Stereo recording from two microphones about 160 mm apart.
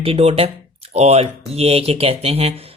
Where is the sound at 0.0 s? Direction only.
35° right (ahead or behind).